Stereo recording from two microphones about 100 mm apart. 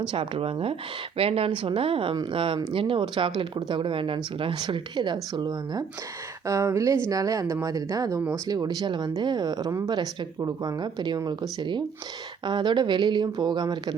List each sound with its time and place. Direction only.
0.1 s speech: 60° right (ahead or behind); by 5.8 s 40° right (ahead or behind)
6.4 s speech: 30° right (ahead or behind)